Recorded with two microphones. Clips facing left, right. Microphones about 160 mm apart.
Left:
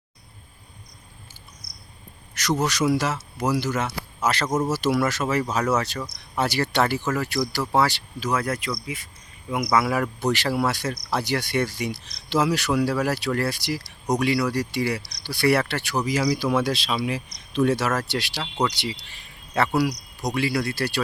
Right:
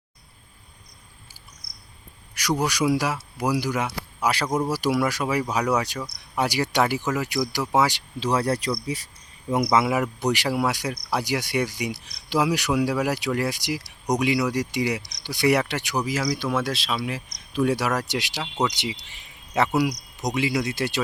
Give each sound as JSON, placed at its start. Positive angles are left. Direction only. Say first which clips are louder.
{"t": 2.3, "sound": "speech", "louder": "left 1 dB", "side_deg": -10}
{"t": 4.4, "sound": "speech", "louder": "left 2 dB", "side_deg": 5}
{"t": 4.7, "sound": "speech", "louder": "left 1 dB", "side_deg": -10}
{"t": 8.2, "sound": "speech", "louder": "right 2 dB", "side_deg": -30}
{"t": 9.6, "sound": "speech", "louder": "right 1 dB", "side_deg": -20}
{"t": 16.0, "sound": "speech", "louder": "left 3 dB", "side_deg": 0}
{"t": 17.5, "sound": "speech", "louder": "left 1 dB", "side_deg": -10}